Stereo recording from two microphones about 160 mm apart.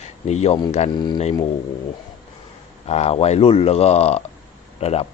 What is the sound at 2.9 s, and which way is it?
Speech, 40° left (ahead or behind).